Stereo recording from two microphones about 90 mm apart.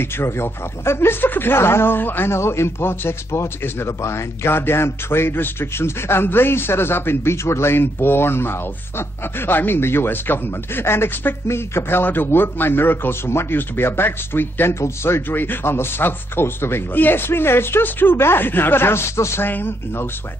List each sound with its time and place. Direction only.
0.0 s speech: 25° left (ahead or behind)